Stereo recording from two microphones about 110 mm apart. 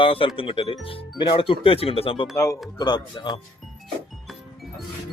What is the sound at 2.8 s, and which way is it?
Speech, 40° left (ahead or behind).